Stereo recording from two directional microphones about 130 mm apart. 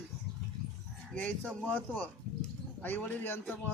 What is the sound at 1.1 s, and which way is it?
Speech, 10° left (ahead or behind).